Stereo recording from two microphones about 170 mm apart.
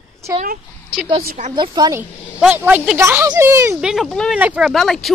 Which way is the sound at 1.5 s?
25° right (ahead or behind).